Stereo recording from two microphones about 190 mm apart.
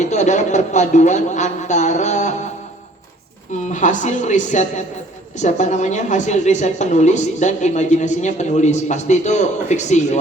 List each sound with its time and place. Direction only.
0.0 s a man's voice: 40° left (ahead or behind)
3.7 s a woman's voice: 40° left (ahead or behind)